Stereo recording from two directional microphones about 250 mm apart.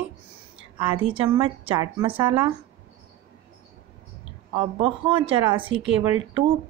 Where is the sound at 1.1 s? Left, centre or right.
Right.